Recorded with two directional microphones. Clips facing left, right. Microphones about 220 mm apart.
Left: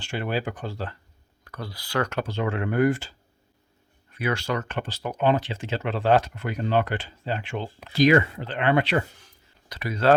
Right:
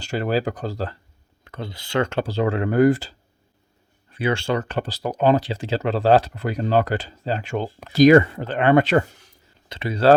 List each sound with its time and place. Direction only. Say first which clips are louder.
0.0 s speech: right 6 dB; 40° right (ahead or behind)
1.5 s speech: right 4 dB; 25° right (ahead or behind); by 9.0 s 45° right (ahead or behind)
9.6 s speech: right 5 dB; 25° right (ahead or behind)